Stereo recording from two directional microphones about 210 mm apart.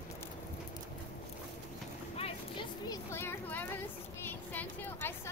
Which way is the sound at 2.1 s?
25° left (ahead or behind).